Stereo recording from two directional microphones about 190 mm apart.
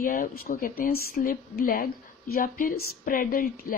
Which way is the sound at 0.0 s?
50° left (ahead or behind).